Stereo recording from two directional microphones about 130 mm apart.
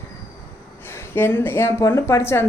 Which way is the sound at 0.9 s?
20° left (ahead or behind).